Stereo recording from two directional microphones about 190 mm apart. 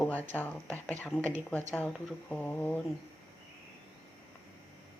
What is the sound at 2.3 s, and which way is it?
Speech, 10° left (ahead or behind).